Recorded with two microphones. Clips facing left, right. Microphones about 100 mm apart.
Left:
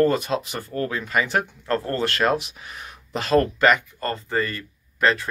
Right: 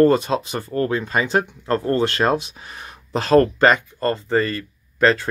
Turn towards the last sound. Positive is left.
turn(degrees=-35)  # may be behind; listen again after turning